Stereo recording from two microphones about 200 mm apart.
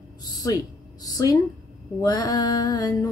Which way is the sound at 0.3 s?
20° left (ahead or behind).